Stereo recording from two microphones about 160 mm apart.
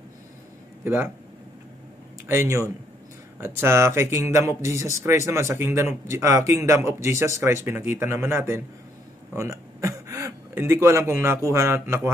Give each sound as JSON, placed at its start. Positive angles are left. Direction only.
{"t": 0.8, "sound": "speech", "side_deg": -15}
{"t": 2.2, "sound": "speech", "side_deg": -15}
{"t": 9.3, "sound": "a sound", "side_deg": -20}
{"t": 11.5, "sound": "speech", "side_deg": -15}